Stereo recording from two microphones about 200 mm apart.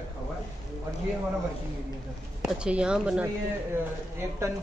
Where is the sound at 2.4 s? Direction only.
5° right (ahead or behind).